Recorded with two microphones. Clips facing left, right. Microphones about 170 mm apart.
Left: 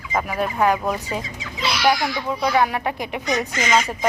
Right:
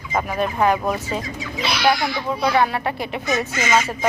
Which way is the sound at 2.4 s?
10° left (ahead or behind).